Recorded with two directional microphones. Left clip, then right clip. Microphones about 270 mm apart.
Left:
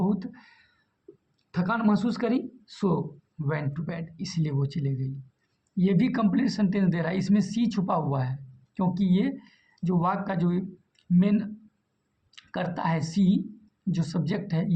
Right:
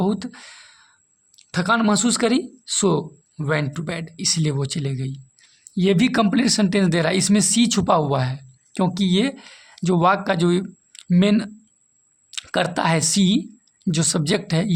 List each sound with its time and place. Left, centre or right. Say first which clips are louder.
0.0 s speech: right 6 dB; right